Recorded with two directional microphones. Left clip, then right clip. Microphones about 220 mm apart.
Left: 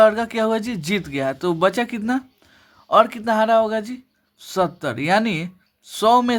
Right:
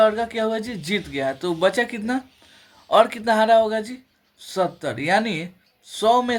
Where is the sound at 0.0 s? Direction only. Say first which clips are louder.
Left 3 dB; 30° left (ahead or behind).